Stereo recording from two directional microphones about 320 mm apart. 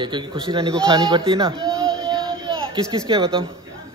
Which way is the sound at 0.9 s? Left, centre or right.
Centre.